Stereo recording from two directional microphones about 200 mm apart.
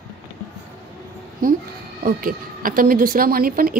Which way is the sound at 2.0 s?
45° right (ahead or behind).